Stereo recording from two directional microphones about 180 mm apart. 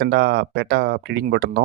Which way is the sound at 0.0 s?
70° right (ahead or behind).